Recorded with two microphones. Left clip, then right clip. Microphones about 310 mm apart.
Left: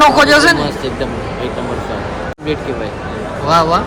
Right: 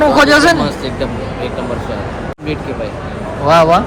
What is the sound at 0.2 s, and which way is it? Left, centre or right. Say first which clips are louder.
Speech: even; centre.